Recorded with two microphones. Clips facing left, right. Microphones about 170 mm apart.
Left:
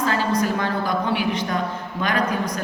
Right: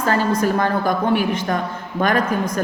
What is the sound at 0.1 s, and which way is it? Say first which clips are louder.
A woman's voice: right 8 dB; 50° right (ahead or behind).